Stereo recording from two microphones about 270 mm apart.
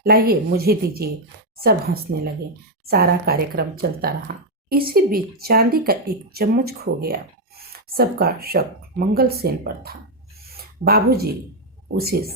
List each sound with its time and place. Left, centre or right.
0.0 s speech: right
10.5 s a sound: right
11.9 s speech: right